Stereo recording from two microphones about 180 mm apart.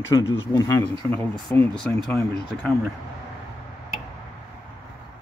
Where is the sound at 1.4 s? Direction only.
5° left (ahead or behind).